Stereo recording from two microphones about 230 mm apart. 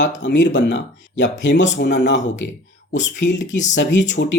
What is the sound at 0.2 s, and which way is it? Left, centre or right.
Speech, left.